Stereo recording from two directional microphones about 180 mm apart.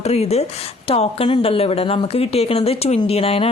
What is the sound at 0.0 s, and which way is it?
A woman's voice, 35° left (ahead or behind).